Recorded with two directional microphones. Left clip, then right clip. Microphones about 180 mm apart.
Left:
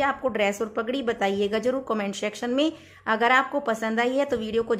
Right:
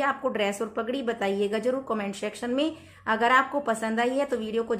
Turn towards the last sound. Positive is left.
turn(degrees=25)  # may be behind; listen again after turning